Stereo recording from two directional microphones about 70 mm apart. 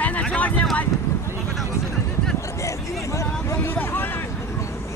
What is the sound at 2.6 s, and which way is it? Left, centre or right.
Vehicle, left.